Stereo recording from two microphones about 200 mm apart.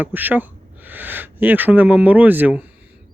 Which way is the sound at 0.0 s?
10° right (ahead or behind).